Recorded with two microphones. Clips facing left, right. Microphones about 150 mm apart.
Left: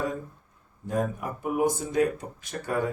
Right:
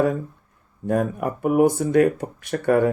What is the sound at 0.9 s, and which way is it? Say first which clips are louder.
Speech: right 6 dB; 65° right (ahead or behind).